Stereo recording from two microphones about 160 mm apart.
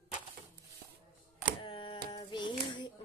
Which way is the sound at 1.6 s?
30° left (ahead or behind).